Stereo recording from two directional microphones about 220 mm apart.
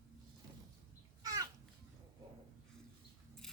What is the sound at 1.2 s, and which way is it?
Children playing, 15° right (ahead or behind).